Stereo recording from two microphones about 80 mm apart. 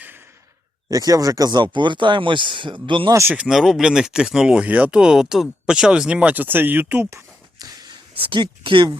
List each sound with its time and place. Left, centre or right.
0.9 s speech: right
3.5 s speech: centre; by 7.1 s right
7.6 s a sound: right